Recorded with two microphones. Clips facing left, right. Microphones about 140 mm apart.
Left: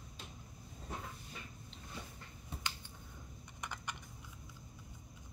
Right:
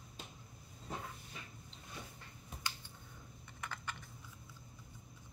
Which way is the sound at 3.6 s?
15° left (ahead or behind).